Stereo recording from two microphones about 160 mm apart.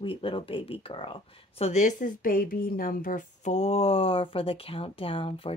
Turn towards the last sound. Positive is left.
turn(degrees=35)  # may be behind; listen again after turning